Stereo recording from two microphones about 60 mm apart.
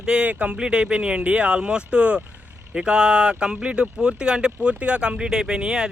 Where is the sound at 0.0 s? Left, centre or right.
Centre.